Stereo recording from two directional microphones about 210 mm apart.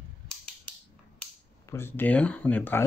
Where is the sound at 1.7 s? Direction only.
10° left (ahead or behind).